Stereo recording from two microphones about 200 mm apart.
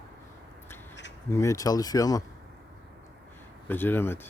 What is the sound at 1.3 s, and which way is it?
Speech, 15° left (ahead or behind).